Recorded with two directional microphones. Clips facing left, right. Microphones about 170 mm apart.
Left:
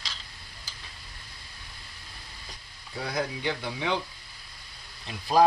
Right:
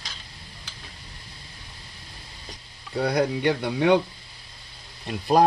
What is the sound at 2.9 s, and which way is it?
Speech, 65° right (ahead or behind).